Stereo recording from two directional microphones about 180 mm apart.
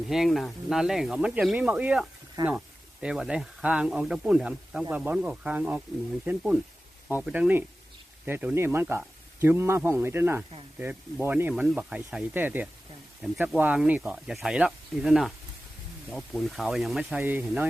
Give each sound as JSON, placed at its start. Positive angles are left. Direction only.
{"t": 0.1, "sound": "speech", "side_deg": 0}
{"t": 2.4, "sound": "speech", "side_deg": -20}
{"t": 3.0, "sound": "speech", "side_deg": -5}